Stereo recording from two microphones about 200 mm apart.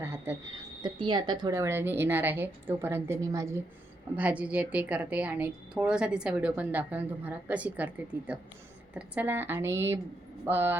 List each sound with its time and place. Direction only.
0.0 s a woman's voice: 10° right (ahead or behind)
0.8 s a woman's voice: 25° right (ahead or behind); by 7.9 s 5° right (ahead or behind)
9.0 s a woman's voice: 10° right (ahead or behind)